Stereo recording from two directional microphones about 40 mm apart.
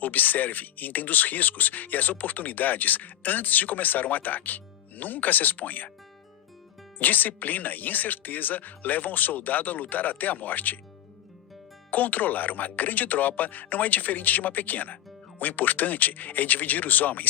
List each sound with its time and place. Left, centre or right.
0.0 s speech: left
7.0 s speech: left
11.9 s speech: left